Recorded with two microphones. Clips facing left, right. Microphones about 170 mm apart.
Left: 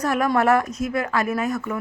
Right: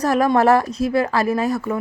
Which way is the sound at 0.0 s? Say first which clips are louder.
Right 4 dB; 35° right (ahead or behind).